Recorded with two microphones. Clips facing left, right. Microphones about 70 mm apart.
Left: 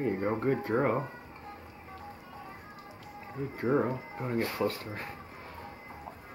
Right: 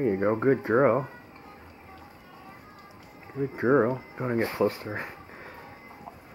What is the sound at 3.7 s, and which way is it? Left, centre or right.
Speech, right.